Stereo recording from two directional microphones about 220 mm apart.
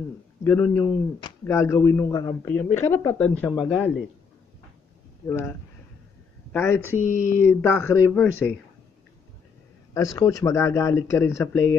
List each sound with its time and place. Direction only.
0.4 s a man's voice: 10° left (ahead or behind)
5.2 s speech: 10° left (ahead or behind)
6.5 s speech: 10° left (ahead or behind)
7.0 s speech: 35° left (ahead or behind)
7.6 s speech: 10° left (ahead or behind)
9.9 s speech: 15° left (ahead or behind)